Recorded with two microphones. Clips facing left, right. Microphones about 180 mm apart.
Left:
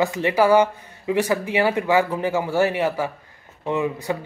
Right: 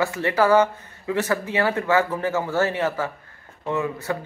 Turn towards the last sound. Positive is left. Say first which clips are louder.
# left 2 dB
turn(degrees=15)  # may be behind; listen again after turning